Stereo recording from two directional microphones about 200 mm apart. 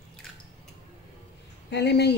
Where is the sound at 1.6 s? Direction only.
55° left (ahead or behind).